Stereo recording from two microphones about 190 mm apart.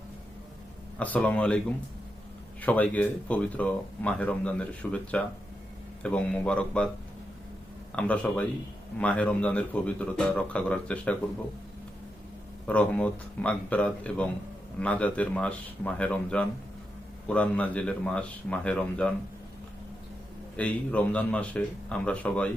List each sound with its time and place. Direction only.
0.9 s speech: 5° left (ahead or behind)
7.9 s speech: 5° left (ahead or behind)
12.6 s speech: 5° left (ahead or behind)
20.6 s speech: 5° left (ahead or behind)